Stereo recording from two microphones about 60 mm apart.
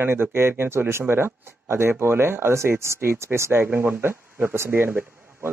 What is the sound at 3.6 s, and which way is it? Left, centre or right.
Speech, right.